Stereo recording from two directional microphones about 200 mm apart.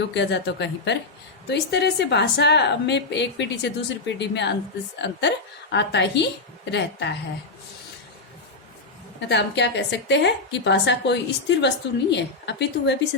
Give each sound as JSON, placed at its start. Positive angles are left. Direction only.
{"t": 0.1, "sound": "a woman's voice", "side_deg": 60}
{"t": 9.3, "sound": "a woman's voice", "side_deg": 60}